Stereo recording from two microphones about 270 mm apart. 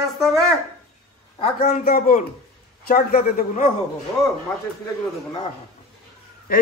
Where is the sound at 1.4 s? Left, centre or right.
Left.